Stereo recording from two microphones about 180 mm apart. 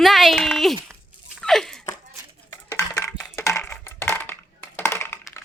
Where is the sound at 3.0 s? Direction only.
10° left (ahead or behind).